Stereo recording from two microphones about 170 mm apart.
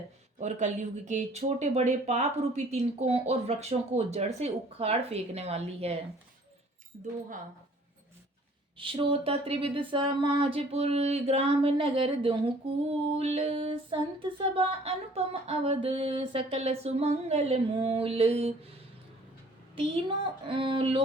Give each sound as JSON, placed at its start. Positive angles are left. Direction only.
{"t": 0.3, "sound": "speech", "side_deg": -45}
{"t": 8.8, "sound": "speech", "side_deg": -30}
{"t": 19.7, "sound": "speech", "side_deg": -30}